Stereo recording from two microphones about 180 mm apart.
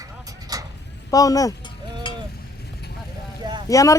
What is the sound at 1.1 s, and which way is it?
Speech, 20° left (ahead or behind).